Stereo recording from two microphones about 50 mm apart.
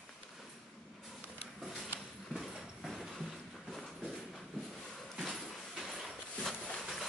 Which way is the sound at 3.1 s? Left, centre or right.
Centre.